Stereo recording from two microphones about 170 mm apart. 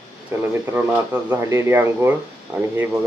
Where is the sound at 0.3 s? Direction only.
15° right (ahead or behind).